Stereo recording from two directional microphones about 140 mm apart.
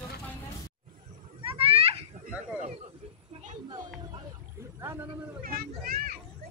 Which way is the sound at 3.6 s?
30° right (ahead or behind).